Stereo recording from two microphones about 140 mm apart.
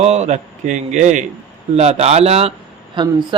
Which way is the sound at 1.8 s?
50° right (ahead or behind).